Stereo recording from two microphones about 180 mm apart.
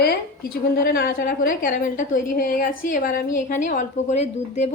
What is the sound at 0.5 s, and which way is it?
A woman's voice, 60° left (ahead or behind).